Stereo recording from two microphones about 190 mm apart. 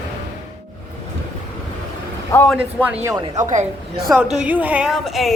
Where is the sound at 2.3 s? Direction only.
10° left (ahead or behind).